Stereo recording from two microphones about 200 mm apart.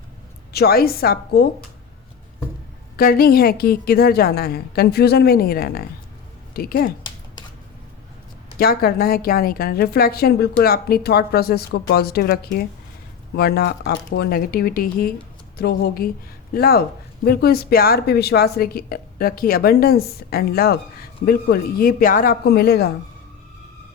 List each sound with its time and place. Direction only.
0.5 s a woman's voice: 50° left (ahead or behind)
2.9 s a woman's voice: 50° left (ahead or behind)
8.5 s a woman's voice: 50° left (ahead or behind)